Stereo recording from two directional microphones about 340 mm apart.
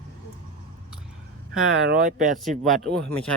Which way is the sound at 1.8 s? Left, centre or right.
Right.